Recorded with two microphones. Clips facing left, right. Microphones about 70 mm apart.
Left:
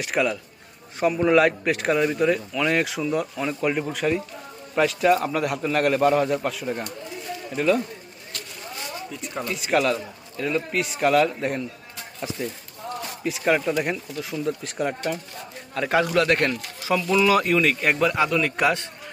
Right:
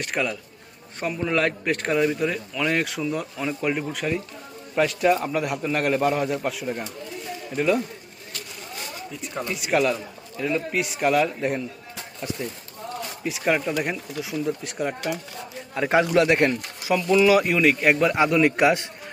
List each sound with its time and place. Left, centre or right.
0.0 s a man's voice: centre
9.5 s a man's voice: centre
15.7 s speech: centre
16.9 s speech: centre
18.3 s speech: centre
18.5 s a man's voice: centre